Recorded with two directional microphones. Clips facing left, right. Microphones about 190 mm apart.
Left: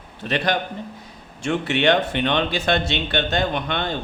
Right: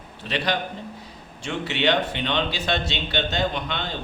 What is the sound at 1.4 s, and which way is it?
A man's voice, 55° left (ahead or behind).